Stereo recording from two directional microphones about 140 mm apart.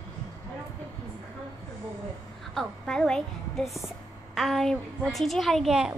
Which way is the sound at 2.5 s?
5° left (ahead or behind).